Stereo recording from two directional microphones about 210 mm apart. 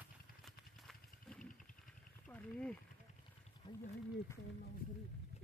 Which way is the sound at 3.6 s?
20° left (ahead or behind).